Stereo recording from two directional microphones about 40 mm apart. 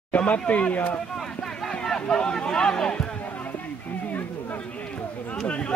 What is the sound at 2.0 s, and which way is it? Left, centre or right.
Speech, centre.